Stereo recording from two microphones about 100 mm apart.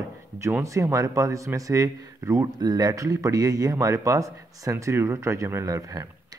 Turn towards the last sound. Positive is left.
turn(degrees=-35)  # may be behind; listen again after turning